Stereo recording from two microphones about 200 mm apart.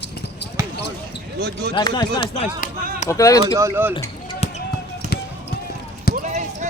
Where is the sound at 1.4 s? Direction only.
55° right (ahead or behind).